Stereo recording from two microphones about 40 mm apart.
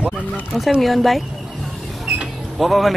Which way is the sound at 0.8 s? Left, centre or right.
Centre.